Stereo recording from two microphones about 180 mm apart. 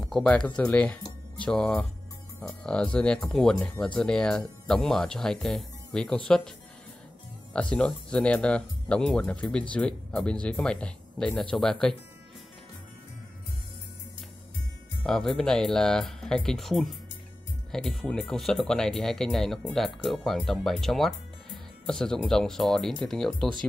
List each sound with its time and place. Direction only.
0.1 s speech: 5° left (ahead or behind)
7.5 s speech: 5° left (ahead or behind)
15.0 s speech: 5° left (ahead or behind)